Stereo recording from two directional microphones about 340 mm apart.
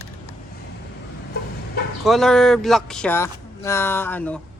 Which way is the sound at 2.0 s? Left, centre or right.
Centre.